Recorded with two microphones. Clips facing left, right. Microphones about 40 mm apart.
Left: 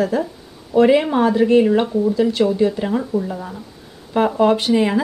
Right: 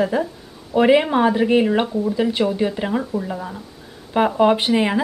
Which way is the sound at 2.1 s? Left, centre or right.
Centre.